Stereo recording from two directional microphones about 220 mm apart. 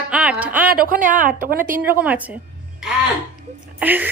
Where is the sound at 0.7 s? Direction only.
40° right (ahead or behind).